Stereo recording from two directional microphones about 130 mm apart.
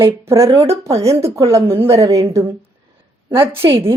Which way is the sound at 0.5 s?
20° right (ahead or behind).